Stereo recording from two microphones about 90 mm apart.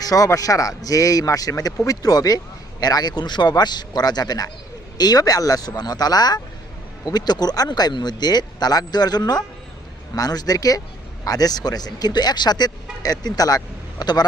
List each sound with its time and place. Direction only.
0.0 s a man's voice: 40° left (ahead or behind)